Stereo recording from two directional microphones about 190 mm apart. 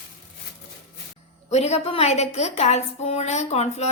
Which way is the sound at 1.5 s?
35° left (ahead or behind).